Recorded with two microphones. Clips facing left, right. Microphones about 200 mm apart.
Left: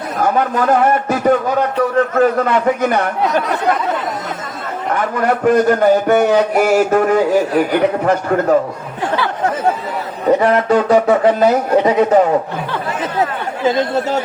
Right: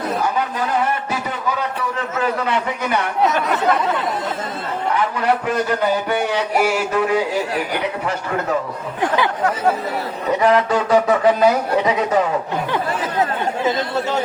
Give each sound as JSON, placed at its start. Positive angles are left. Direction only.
{"t": 0.2, "sound": "a man's voice", "side_deg": 50}
{"t": 4.9, "sound": "a man's voice", "side_deg": 50}
{"t": 10.2, "sound": "a man's voice", "side_deg": 45}